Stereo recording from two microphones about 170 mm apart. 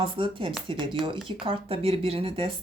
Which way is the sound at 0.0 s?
30° right (ahead or behind).